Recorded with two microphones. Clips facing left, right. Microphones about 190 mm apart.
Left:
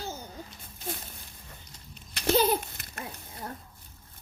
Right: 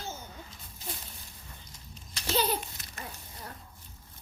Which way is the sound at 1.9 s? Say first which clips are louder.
Left 6 dB; 60° left (ahead or behind).